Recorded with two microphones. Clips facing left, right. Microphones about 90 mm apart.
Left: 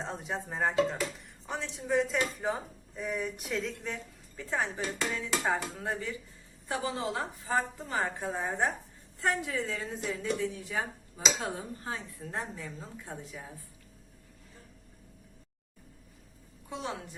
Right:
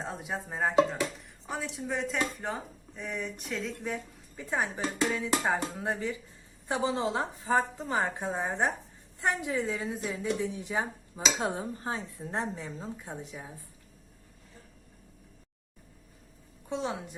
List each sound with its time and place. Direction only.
0.0 s a woman's voice: 5° right (ahead or behind)
4.4 s a woman's voice: 15° right (ahead or behind)
16.6 s a woman's voice: 25° right (ahead or behind)